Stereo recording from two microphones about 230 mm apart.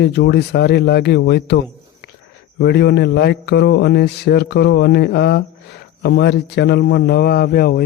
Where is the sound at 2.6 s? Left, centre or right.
Left.